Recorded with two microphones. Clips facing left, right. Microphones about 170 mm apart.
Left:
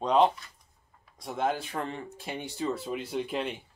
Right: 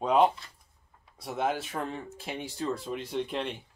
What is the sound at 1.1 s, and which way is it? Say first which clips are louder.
Speech: even; 5° right (ahead or behind).